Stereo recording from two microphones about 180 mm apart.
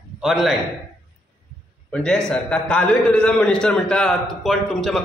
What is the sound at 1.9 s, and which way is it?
A man's voice, 5° left (ahead or behind).